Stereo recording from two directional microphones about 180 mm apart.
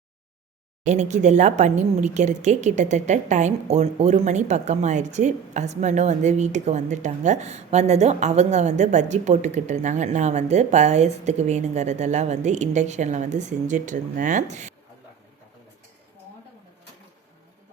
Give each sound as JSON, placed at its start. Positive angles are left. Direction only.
{"t": 0.9, "sound": "a woman's voice", "side_deg": -40}